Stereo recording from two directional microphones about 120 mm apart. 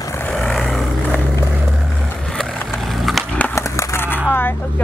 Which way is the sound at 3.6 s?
20° left (ahead or behind).